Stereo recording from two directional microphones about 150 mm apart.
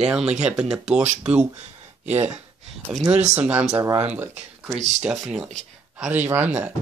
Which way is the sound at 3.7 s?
25° right (ahead or behind).